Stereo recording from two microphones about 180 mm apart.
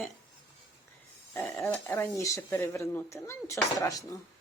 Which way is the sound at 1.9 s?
15° left (ahead or behind).